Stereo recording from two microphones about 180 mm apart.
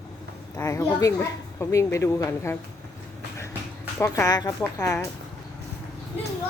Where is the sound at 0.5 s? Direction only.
15° left (ahead or behind).